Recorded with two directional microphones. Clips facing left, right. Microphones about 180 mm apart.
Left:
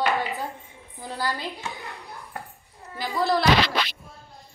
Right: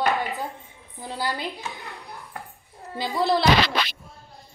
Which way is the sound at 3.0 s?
25° right (ahead or behind).